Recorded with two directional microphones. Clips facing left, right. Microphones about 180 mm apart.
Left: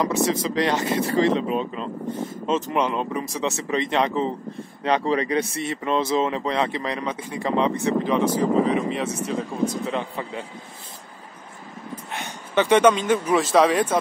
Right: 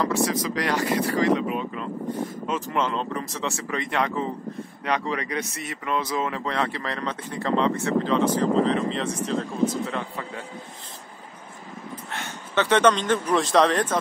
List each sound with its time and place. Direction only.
0.0 s speech: 20° left (ahead or behind)
12.1 s speech: 15° left (ahead or behind)